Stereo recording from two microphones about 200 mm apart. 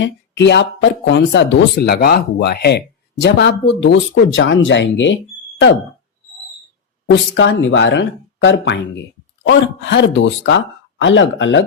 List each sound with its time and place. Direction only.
0.0 s speech: 60° left (ahead or behind)
7.1 s speech: 65° left (ahead or behind)